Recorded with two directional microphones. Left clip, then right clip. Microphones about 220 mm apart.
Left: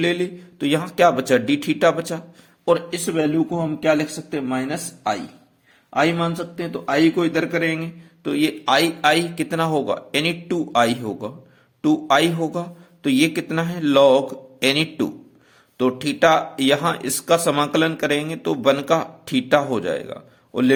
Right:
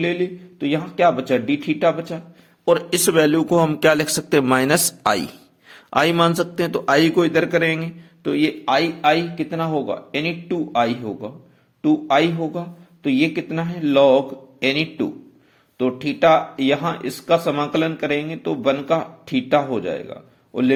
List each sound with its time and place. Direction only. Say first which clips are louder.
0.0 s speech: even; 15° left (ahead or behind)
3.1 s a man's voice: right 5 dB; 45° right (ahead or behind); by 20.7 s 10° left (ahead or behind)